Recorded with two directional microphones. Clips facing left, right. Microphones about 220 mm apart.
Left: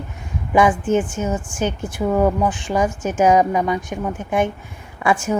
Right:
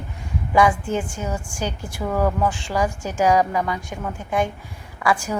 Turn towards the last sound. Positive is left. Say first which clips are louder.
# left 3 dB
turn(degrees=25)  # may be behind; listen again after turning